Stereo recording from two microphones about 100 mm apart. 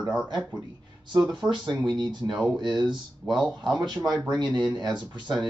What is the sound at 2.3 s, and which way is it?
Speech, 10° right (ahead or behind).